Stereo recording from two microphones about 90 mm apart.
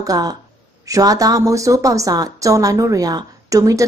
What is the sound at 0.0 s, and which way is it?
A woman's voice, 45° right (ahead or behind).